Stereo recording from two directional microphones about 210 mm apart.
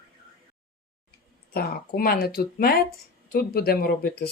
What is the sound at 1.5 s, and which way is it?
Speech, 45° left (ahead or behind).